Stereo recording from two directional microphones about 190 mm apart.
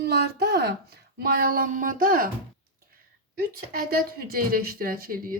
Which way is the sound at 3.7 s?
50° right (ahead or behind).